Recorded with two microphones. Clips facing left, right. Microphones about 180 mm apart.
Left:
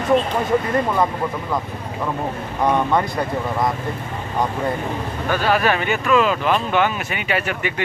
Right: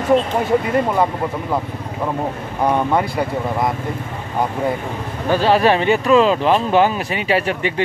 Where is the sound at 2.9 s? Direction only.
5° right (ahead or behind).